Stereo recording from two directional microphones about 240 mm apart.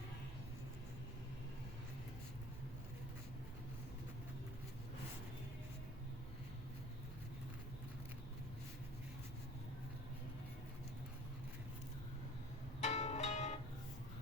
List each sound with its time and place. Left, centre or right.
12.8 s music: left